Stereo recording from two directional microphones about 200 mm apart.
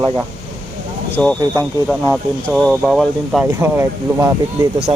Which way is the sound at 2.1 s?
5° right (ahead or behind).